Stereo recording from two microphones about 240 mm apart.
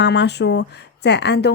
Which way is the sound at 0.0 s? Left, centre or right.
Left.